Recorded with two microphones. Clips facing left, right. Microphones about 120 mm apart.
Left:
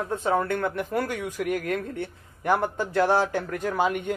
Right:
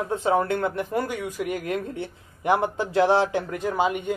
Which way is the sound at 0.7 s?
5° right (ahead or behind).